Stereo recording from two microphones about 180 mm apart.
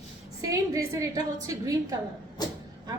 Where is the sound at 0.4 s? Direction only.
15° right (ahead or behind).